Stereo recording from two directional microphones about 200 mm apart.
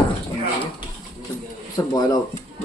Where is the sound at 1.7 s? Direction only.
20° left (ahead or behind).